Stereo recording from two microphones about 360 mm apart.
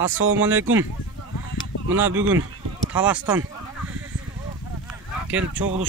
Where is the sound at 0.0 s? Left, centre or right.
Right.